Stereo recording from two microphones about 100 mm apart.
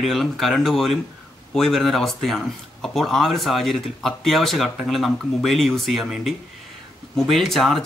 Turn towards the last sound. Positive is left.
turn(degrees=0)  # may be behind; listen again after turning